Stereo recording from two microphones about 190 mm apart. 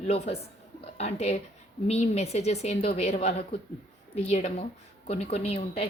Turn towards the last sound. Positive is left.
turn(degrees=30)  # may be behind; listen again after turning